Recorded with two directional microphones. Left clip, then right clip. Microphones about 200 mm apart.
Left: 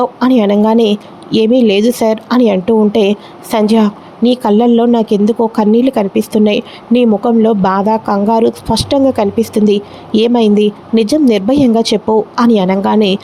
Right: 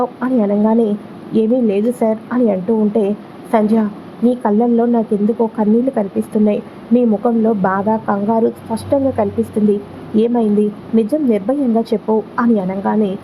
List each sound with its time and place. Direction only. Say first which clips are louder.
0.0 s a woman's voice: left 6 dB; 40° left (ahead or behind)
0.8 s a woman's voice: left 5 dB; 30° left (ahead or behind)